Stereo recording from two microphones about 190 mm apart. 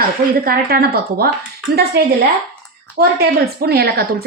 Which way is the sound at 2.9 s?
55° right (ahead or behind).